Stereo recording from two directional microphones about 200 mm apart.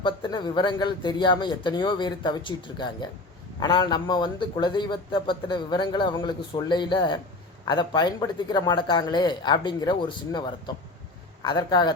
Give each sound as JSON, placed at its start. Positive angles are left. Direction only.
{"t": 0.0, "sound": "a man's voice", "side_deg": 20}